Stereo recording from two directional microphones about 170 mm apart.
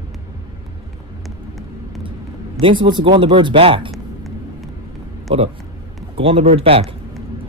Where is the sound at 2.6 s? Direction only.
30° right (ahead or behind).